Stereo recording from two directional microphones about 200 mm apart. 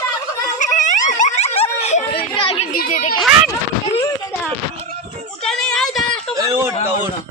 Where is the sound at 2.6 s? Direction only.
45° left (ahead or behind).